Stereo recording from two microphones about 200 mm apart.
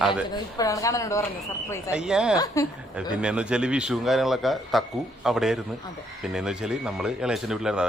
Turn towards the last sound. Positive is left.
turn(degrees=0)  # may be behind; listen again after turning